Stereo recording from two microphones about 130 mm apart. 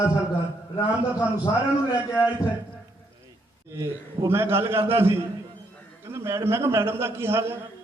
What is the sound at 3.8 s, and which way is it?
A man's voice, 20° right (ahead or behind).